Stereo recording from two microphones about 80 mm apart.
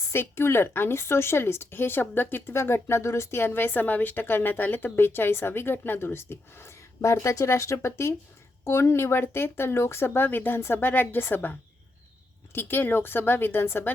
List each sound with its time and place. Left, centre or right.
0.1 s speech: left
12.5 s speech: left